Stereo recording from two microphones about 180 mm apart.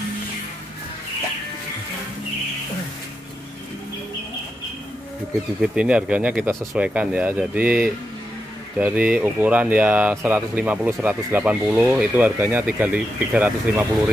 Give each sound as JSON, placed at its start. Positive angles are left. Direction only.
{"t": 5.6, "sound": "speech", "side_deg": -5}